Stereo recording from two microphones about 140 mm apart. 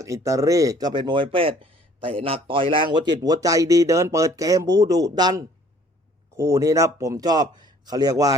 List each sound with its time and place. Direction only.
0.0 s speech: 20° right (ahead or behind)